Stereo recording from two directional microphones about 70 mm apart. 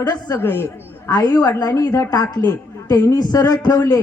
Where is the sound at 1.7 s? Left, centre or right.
Left.